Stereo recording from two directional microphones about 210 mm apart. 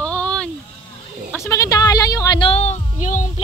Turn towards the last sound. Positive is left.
turn(degrees=35)  # may be behind; listen again after turning